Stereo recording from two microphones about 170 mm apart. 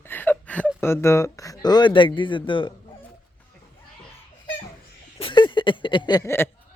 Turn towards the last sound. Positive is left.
turn(degrees=15)  # may be behind; listen again after turning